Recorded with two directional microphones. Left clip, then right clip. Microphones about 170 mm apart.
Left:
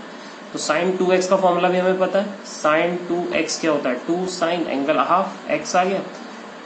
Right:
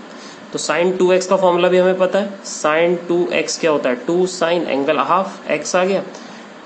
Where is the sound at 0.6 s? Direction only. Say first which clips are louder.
Right 4 dB; 85° right.